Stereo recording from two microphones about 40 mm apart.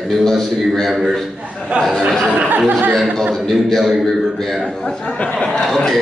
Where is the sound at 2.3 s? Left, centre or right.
Right.